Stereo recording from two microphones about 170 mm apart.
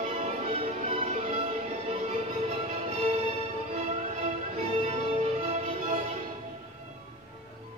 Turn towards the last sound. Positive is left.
turn(degrees=-40)  # may be behind; listen again after turning